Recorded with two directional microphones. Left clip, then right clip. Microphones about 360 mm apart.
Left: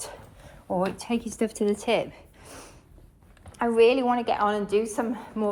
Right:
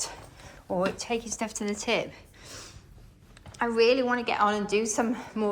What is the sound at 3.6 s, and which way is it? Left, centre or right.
A woman's voice, centre.